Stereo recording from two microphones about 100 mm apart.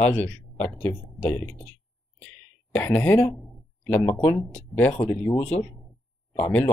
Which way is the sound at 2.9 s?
25° left (ahead or behind).